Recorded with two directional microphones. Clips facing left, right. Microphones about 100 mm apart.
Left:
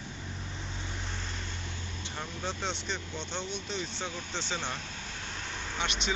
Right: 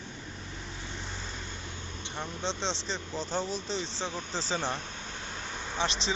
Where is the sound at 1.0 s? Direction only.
5° right (ahead or behind).